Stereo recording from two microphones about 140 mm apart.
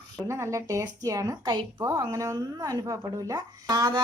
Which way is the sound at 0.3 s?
20° right (ahead or behind).